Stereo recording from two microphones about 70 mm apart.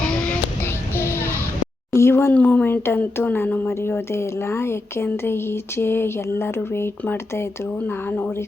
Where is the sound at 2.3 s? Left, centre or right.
Left.